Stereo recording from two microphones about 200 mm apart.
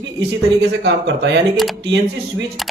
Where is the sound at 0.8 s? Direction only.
60° right (ahead or behind).